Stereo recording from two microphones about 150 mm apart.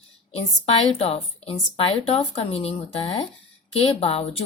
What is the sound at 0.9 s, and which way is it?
A woman's voice, 45° left (ahead or behind).